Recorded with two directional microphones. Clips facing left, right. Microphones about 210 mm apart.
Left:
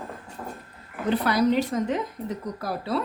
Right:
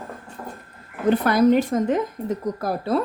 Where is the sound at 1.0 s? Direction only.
50° right (ahead or behind).